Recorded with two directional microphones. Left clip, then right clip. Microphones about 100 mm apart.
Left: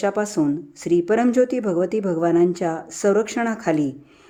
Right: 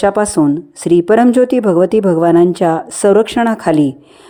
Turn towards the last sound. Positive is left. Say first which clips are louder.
# right 10 dB
turn(degrees=-50)  # may be behind; listen again after turning